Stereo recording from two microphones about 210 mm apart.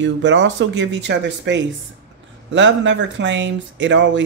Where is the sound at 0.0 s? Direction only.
60° right (ahead or behind).